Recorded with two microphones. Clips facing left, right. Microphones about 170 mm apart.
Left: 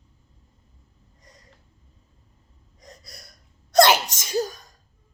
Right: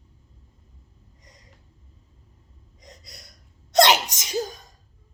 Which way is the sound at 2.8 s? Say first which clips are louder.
Left 2 dB; 20° right (ahead or behind).